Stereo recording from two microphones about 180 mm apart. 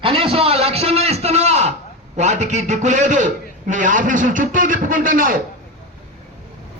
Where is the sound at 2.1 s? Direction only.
40° right (ahead or behind).